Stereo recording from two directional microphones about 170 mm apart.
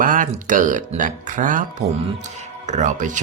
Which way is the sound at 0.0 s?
50° right (ahead or behind).